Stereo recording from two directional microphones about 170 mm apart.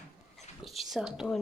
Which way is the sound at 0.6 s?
Centre (ahead or behind).